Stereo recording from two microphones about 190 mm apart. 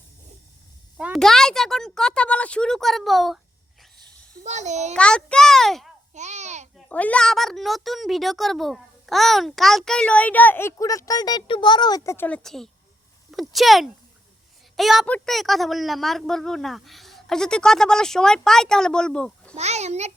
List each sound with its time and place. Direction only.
0.9 s a child's voice: 5° right (ahead or behind)
4.4 s a child's voice: 40° right (ahead or behind)
4.9 s a child's voice: 5° left (ahead or behind)
6.1 s a sound: 40° right (ahead or behind)
6.7 s a child's voice: 5° left (ahead or behind)
19.5 s a child's voice: 35° right (ahead or behind)